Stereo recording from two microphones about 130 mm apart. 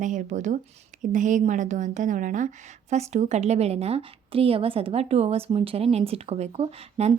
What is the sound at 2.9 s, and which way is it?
A woman's voice, 60° right (ahead or behind).